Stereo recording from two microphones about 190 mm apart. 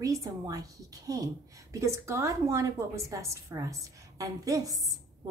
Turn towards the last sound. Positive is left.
turn(degrees=-20)  # may be behind; listen again after turning